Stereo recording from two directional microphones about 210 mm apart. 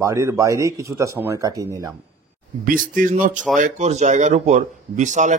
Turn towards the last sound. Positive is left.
turn(degrees=-35)  # may be behind; listen again after turning